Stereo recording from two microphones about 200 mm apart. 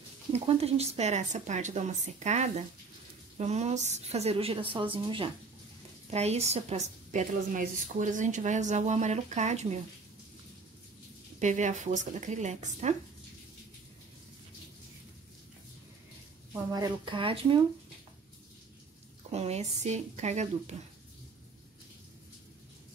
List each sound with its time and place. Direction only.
0.3 s a woman's voice: 30° right (ahead or behind)
11.3 s a woman's voice: 35° right (ahead or behind)
16.7 s speech: 20° right (ahead or behind)
19.3 s a woman's voice: 35° right (ahead or behind)